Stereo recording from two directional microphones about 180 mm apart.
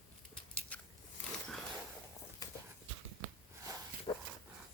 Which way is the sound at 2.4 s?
20° left (ahead or behind).